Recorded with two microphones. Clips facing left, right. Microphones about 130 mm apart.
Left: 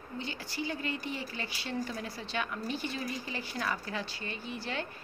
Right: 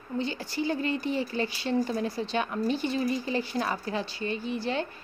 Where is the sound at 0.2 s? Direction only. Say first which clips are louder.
Right 7 dB; 30° right (ahead or behind).